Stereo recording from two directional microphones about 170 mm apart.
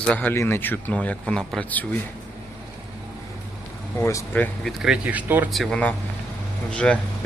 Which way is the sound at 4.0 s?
15° left (ahead or behind).